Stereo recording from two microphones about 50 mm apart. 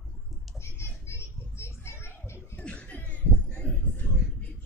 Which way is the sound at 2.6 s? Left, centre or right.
Left.